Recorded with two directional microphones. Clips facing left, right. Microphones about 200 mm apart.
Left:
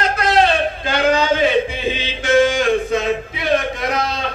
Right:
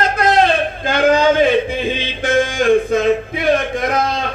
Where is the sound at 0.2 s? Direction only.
50° right (ahead or behind).